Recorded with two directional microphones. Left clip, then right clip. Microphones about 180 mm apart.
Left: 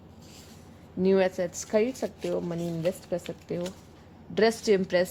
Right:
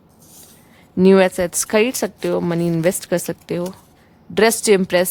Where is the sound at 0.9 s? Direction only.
40° right (ahead or behind).